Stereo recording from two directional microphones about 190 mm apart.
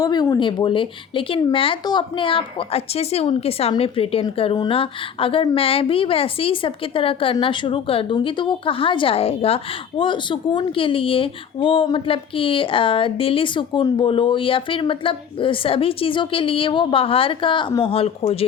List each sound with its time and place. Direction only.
0.0 s speech: 20° left (ahead or behind)